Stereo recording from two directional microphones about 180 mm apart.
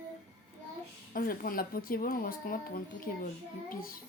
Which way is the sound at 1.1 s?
50° left (ahead or behind).